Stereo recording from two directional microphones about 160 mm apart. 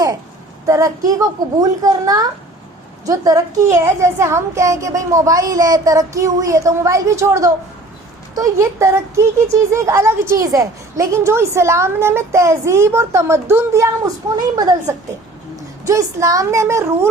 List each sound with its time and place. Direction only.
0.7 s a woman's voice: 20° right (ahead or behind)